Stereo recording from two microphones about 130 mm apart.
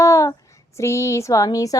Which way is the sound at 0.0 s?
25° left (ahead or behind).